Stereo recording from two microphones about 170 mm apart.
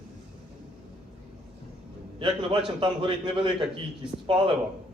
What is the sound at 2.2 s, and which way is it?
A man's voice, 30° right (ahead or behind).